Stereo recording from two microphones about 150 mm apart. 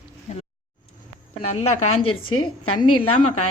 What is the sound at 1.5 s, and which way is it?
Speech, 45° left (ahead or behind).